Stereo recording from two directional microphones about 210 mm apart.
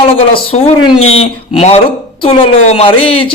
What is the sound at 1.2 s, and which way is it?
Music, 30° left (ahead or behind).